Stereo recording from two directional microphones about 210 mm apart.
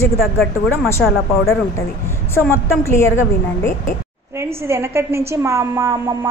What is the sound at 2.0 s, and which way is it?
A woman's voice, 10° left (ahead or behind).